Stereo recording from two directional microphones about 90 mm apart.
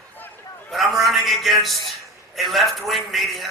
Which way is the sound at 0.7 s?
Centre (ahead or behind).